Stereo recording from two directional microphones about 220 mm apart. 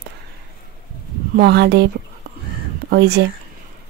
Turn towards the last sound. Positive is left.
turn(degrees=-50)  # may be behind; listen again after turning